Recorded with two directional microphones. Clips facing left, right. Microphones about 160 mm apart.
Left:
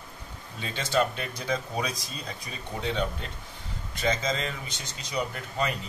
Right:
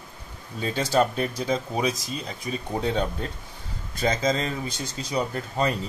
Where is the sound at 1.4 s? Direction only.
25° right (ahead or behind).